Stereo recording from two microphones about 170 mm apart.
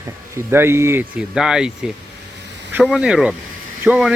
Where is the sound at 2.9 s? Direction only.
5° right (ahead or behind).